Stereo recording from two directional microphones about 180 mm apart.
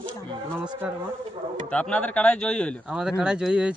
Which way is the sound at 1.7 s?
5° left (ahead or behind).